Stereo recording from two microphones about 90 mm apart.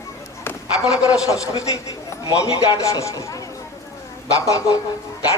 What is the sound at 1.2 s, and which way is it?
A man's voice, 35° left (ahead or behind).